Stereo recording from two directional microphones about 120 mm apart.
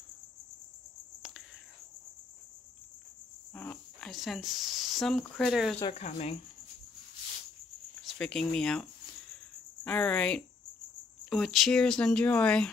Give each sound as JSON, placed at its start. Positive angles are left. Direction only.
{"t": 3.5, "sound": "cricket", "side_deg": 15}
{"t": 4.1, "sound": "speech", "side_deg": 0}
{"t": 5.8, "sound": "speech", "side_deg": 55}
{"t": 8.0, "sound": "speech", "side_deg": 5}
{"t": 9.8, "sound": "speech", "side_deg": 10}